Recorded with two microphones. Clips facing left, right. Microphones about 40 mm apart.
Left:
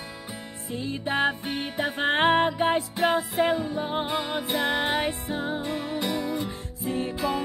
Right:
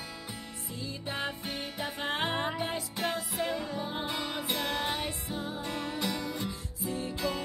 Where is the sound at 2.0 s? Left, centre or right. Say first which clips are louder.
Left 11 dB; left.